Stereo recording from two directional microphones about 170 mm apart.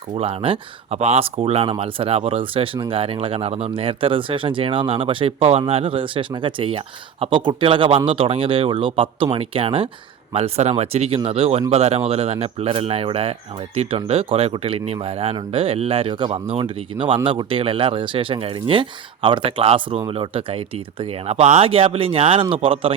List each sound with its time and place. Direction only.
0.1 s speech: 35° right (ahead or behind)